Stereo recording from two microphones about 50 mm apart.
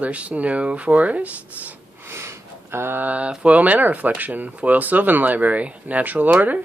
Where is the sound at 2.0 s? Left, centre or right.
Right.